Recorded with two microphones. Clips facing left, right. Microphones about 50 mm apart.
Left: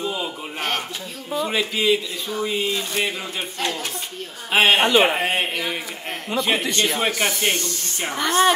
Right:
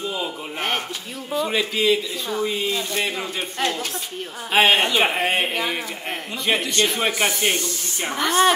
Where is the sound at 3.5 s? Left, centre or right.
Centre.